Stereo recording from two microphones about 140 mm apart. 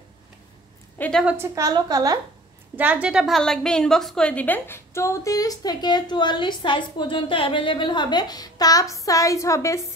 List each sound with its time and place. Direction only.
0.9 s a woman's voice: 10° left (ahead or behind)
1.5 s a woman's voice: 25° right (ahead or behind)
2.7 s a woman's voice: 10° right (ahead or behind); by 9.8 s 20° left (ahead or behind)